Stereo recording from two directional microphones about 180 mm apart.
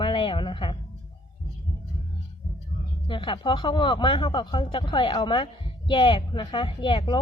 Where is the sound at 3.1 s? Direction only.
25° left (ahead or behind).